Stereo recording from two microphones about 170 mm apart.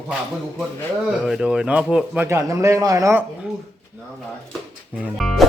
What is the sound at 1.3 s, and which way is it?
Speech, 5° right (ahead or behind).